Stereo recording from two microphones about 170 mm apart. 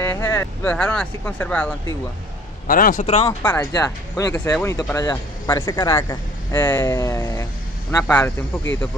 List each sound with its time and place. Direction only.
0.0 s speech: 15° left (ahead or behind)
2.6 s a man's voice: 55° left (ahead or behind)
3.3 s speech: 15° left (ahead or behind)